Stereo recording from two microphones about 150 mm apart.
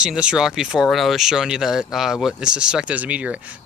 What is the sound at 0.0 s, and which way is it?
Speech, 5° right (ahead or behind).